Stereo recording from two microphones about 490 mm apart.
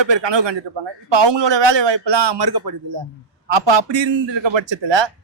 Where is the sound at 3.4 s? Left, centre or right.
Right.